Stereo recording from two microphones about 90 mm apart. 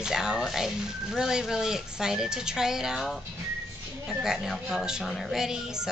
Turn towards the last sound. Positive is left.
turn(degrees=-5)  # may be behind; listen again after turning